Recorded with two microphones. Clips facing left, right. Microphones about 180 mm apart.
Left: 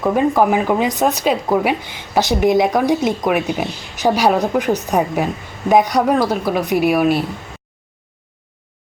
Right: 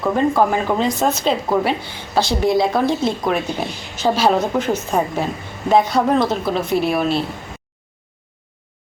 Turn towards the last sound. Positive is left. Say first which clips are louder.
# left 3 dB
turn(degrees=15)  # may be behind; listen again after turning